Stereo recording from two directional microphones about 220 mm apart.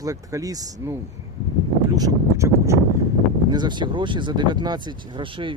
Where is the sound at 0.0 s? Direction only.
15° right (ahead or behind).